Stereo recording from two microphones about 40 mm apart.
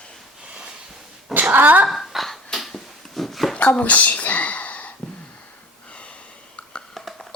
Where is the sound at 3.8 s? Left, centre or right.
Left.